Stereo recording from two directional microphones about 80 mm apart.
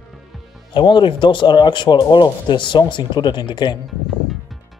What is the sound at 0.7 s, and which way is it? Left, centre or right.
Speech, left.